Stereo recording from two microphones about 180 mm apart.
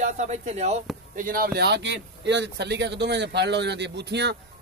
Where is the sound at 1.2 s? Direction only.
50° right (ahead or behind).